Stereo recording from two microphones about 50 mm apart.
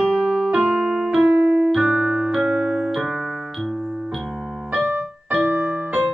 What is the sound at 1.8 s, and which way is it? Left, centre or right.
Music, right.